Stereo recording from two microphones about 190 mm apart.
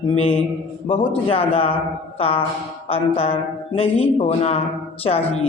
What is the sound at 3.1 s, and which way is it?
Speech, 30° left (ahead or behind).